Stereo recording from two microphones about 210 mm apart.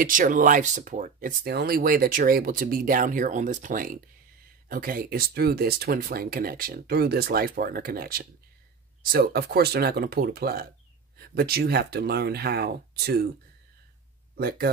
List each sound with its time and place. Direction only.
0.0 s speech: 40° right (ahead or behind)
14.3 s speech: 45° right (ahead or behind)